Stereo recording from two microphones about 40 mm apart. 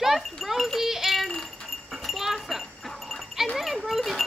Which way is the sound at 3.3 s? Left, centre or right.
Centre.